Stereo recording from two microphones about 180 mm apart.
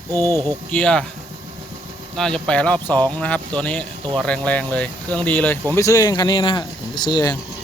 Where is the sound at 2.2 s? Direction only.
5° left (ahead or behind); by 7.4 s 20° left (ahead or behind).